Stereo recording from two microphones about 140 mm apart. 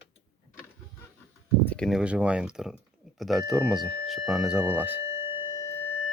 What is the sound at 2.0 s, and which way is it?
Speech, 10° right (ahead or behind).